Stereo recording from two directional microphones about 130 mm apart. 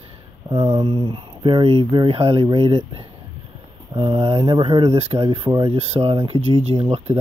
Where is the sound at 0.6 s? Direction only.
45° right (ahead or behind).